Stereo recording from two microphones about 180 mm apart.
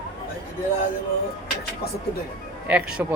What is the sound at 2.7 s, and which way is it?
Speech, 5° right (ahead or behind).